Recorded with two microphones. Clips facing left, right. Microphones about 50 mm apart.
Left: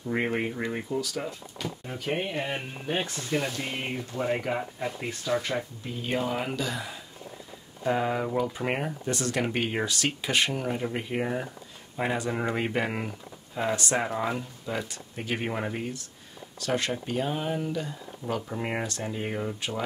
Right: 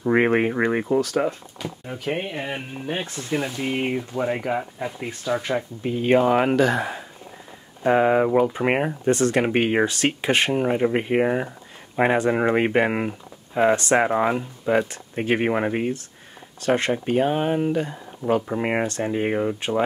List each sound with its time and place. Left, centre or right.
0.0 s speech: right
1.6 s speech: centre
5.8 s speech: right
7.8 s speech: right